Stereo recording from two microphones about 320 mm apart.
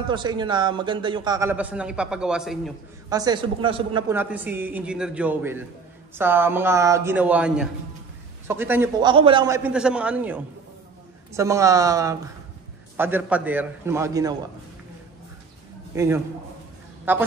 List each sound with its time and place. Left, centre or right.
0.1 s a man's voice: centre
3.1 s a man's voice: centre
15.9 s a man's voice: centre